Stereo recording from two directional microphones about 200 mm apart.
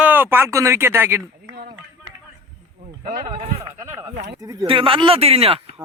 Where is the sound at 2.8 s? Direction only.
35° right (ahead or behind).